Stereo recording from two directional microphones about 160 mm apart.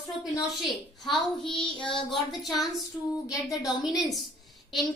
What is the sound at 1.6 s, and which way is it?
Child singing, 30° left (ahead or behind).